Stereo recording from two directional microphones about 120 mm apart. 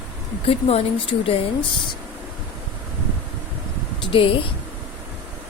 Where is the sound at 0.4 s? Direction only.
55° left (ahead or behind).